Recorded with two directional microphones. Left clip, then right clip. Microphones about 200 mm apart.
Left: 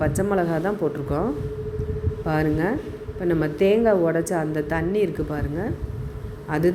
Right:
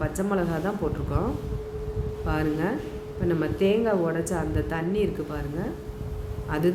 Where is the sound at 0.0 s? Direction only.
25° left (ahead or behind).